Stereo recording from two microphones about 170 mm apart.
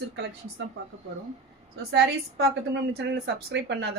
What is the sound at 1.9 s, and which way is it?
Speech, 90° right.